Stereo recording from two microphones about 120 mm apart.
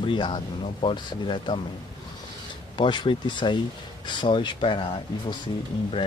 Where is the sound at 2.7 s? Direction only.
40° left (ahead or behind).